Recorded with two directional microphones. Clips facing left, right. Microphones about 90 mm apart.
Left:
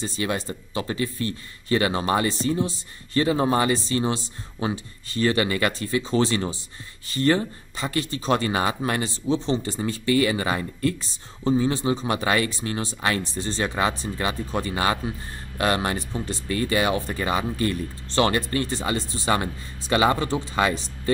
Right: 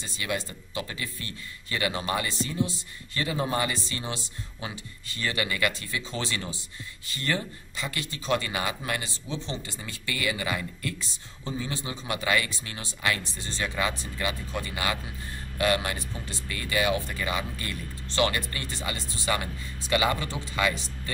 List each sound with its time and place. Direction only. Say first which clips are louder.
0.0 s speech: left 5 dB; 35° left (ahead or behind)